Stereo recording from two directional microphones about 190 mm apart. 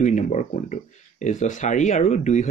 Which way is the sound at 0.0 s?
40° left (ahead or behind).